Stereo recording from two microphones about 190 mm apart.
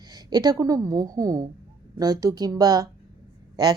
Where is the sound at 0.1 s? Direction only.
20° right (ahead or behind).